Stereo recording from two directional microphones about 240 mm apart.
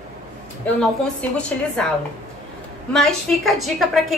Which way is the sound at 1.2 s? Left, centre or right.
Centre.